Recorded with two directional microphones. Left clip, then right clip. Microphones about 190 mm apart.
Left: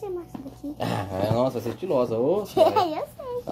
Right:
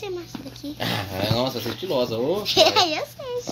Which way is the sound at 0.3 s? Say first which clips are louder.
Right 2 dB; 15° right (ahead or behind).